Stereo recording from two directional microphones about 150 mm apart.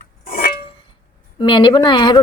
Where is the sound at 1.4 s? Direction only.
35° left (ahead or behind).